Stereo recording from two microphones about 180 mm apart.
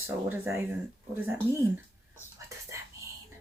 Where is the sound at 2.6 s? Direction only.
15° right (ahead or behind).